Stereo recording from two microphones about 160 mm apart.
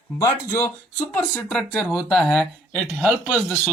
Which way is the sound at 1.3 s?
5° left (ahead or behind).